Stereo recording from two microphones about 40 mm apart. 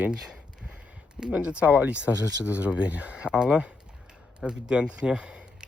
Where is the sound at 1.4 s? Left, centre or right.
Right.